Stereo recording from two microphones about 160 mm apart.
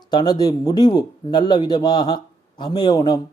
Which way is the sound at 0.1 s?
25° left (ahead or behind).